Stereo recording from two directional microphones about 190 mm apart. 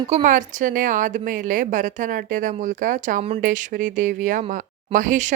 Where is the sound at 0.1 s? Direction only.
40° right (ahead or behind).